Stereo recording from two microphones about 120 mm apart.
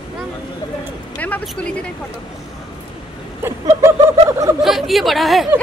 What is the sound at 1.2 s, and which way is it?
Speech, 10° left (ahead or behind).